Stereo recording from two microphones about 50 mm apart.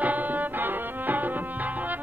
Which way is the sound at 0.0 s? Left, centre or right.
Right.